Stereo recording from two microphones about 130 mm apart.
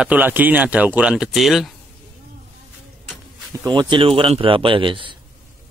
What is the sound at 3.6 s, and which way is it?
Speech, 35° right (ahead or behind).